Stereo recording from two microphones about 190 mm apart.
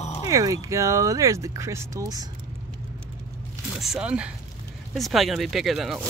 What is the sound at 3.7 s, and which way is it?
Speech, 5° right (ahead or behind).